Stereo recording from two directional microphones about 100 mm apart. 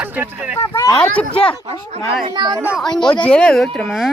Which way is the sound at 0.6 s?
35° left (ahead or behind).